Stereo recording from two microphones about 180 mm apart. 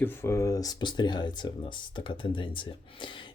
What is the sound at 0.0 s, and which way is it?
Speech, 10° left (ahead or behind).